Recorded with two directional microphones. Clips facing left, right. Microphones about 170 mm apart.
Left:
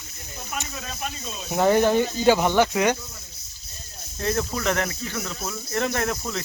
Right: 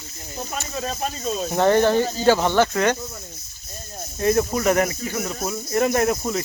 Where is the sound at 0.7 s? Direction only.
35° right (ahead or behind).